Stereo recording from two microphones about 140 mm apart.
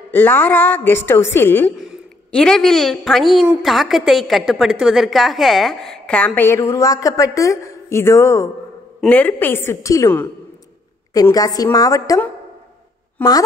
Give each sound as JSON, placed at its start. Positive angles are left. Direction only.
{"t": 0.1, "sound": "a woman's voice", "side_deg": 15}
{"t": 1.8, "sound": "a woman's voice", "side_deg": 0}
{"t": 13.2, "sound": "speech", "side_deg": 10}